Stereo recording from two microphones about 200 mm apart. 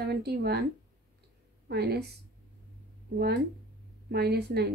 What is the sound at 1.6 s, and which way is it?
Speech, 55° right (ahead or behind).